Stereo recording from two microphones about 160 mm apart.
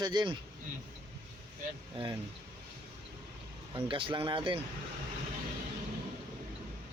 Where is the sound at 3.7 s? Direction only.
30° right (ahead or behind).